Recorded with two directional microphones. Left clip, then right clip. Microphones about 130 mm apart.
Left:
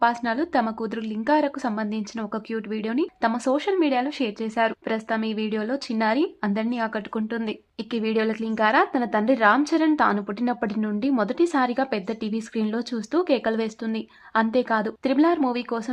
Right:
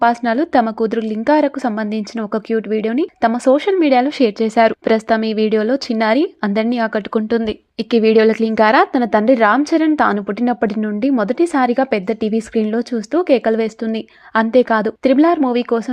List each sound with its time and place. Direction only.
0.0 s speech: 45° right (ahead or behind)
9.6 s a woman's voice: 25° right (ahead or behind)
9.8 s a woman's voice: 40° right (ahead or behind)